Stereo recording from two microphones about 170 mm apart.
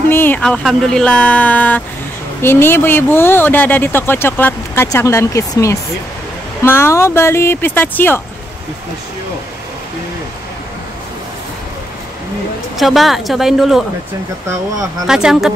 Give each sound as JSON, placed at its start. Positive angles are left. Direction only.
{"t": 0.1, "sound": "speech", "side_deg": 10}
{"t": 12.7, "sound": "speech", "side_deg": 0}
{"t": 15.0, "sound": "speech", "side_deg": -5}